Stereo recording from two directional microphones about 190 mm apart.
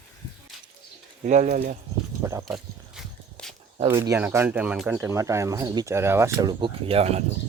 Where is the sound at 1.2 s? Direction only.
40° right (ahead or behind).